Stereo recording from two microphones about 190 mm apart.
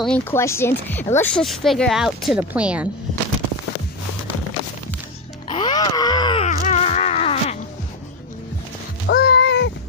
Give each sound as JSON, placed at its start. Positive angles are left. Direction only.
{"t": 0.0, "sound": "speech", "side_deg": 10}
{"t": 5.5, "sound": "groan", "side_deg": 25}
{"t": 6.4, "sound": "a sound", "side_deg": 35}
{"t": 9.0, "sound": "music", "side_deg": 55}